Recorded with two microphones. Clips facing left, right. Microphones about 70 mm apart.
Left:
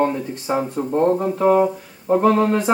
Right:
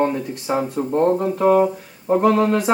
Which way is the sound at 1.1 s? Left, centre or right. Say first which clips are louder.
Even; centre.